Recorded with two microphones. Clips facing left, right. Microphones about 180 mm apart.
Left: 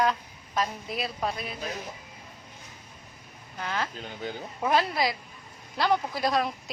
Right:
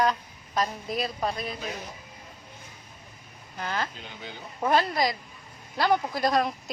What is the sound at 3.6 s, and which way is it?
Speech, centre (ahead or behind).